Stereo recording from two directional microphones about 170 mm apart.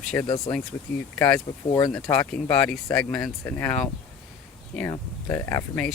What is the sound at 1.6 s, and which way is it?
Speech, 20° left (ahead or behind).